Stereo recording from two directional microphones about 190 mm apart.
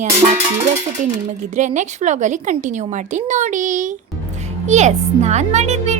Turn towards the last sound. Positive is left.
turn(degrees=-35)  # may be behind; listen again after turning